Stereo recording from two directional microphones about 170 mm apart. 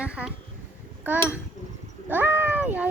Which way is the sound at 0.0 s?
5° right (ahead or behind).